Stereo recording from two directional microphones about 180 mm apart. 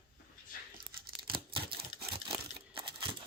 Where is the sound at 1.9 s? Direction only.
40° right (ahead or behind).